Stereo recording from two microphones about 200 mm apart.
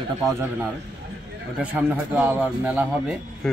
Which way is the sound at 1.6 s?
5° right (ahead or behind).